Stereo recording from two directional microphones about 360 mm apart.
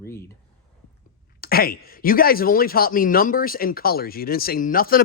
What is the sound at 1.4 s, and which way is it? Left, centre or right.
Speech, left.